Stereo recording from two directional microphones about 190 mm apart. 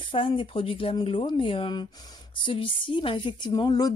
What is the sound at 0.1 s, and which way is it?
Speech, 25° left (ahead or behind).